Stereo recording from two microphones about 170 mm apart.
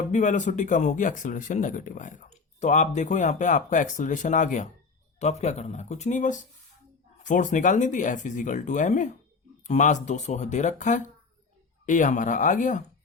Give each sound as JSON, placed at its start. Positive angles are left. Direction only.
{"t": 0.1, "sound": "speech", "side_deg": 45}